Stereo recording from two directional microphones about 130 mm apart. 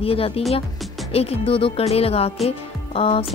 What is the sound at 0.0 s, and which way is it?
Speech, 45° left (ahead or behind).